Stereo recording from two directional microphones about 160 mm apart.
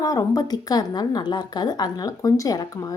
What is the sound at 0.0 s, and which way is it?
Speech, 20° left (ahead or behind).